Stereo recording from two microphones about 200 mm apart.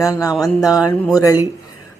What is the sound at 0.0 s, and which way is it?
Speech, 15° left (ahead or behind).